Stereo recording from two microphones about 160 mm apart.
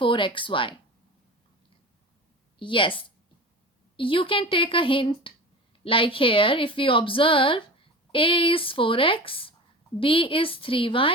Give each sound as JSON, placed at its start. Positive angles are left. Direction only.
{"t": 0.0, "sound": "speech", "side_deg": 30}
{"t": 2.6, "sound": "speech", "side_deg": 30}